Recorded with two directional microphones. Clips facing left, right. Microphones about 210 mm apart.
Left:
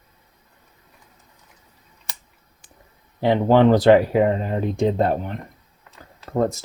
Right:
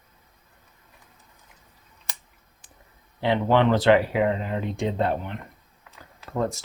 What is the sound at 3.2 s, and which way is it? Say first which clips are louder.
Speech: left 5 dB; 45° left (ahead or behind).